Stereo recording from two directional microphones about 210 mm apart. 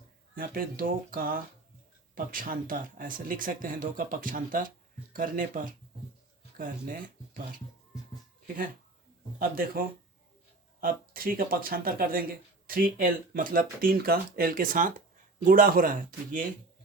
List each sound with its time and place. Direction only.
0.3 s speech: 45° right (ahead or behind)
9.4 s speech: 45° right (ahead or behind)